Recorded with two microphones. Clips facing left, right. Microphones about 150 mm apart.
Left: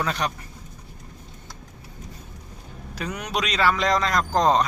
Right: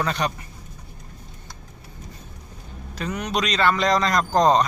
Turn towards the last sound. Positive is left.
turn(degrees=0)  # may be behind; listen again after turning